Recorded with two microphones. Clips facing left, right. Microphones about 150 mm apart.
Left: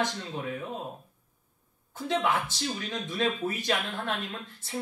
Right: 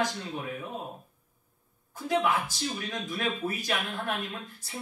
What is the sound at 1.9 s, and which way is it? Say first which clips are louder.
A man's voice: right 1 dB; 25° left (ahead or behind).